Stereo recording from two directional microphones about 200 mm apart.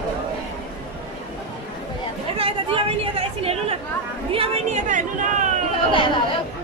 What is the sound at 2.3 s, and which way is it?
Chatter, 30° right (ahead or behind).